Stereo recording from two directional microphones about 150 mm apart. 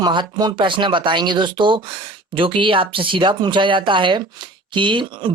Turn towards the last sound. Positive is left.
turn(degrees=-35)  # may be behind; listen again after turning